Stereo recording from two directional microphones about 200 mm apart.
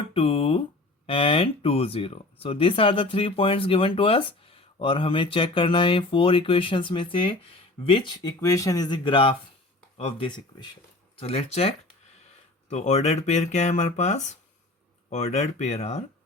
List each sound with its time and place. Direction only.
0.1 s speech: 30° left (ahead or behind)